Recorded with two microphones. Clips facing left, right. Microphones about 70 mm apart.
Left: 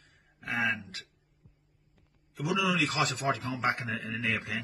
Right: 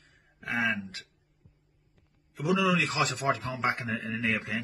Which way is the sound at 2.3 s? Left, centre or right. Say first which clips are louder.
Right 3 dB; right.